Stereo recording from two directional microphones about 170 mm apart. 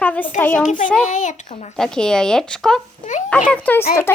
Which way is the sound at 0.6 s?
50° left (ahead or behind).